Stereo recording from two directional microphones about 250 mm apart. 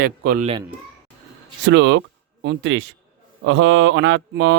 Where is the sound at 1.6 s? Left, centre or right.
Right.